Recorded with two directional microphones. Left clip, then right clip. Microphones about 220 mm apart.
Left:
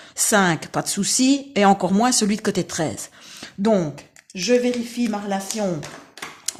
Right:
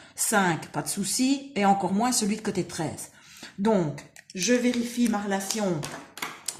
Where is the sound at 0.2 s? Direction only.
40° left (ahead or behind).